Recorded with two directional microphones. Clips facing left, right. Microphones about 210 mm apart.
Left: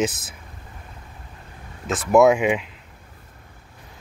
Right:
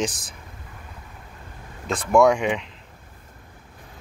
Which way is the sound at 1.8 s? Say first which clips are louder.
Left 2 dB; centre (ahead or behind).